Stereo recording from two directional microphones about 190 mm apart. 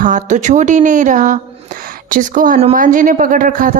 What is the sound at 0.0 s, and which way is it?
A woman's voice, 40° right (ahead or behind).